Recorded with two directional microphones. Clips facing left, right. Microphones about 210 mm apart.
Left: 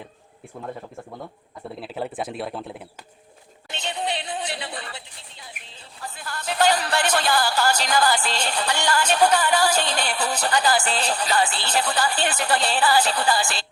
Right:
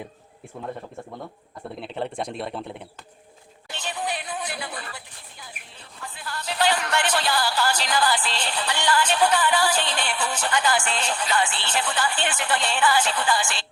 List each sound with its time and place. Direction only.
1.6 s speech: 5° left (ahead or behind)
3.7 s music: 20° left (ahead or behind)
6.0 s speech: 45° left (ahead or behind)